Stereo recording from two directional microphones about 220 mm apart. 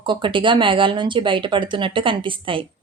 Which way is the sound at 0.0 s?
20° right (ahead or behind).